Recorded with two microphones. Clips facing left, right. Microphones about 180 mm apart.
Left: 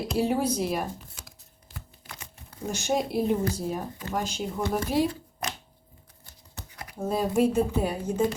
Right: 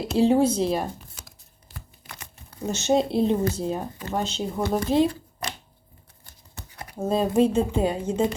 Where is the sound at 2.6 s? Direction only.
25° right (ahead or behind).